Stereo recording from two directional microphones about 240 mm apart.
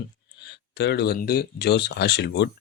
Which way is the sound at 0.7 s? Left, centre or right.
Left.